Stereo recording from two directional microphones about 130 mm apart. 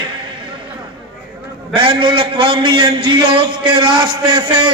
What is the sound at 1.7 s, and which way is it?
A man's voice, 40° right (ahead or behind).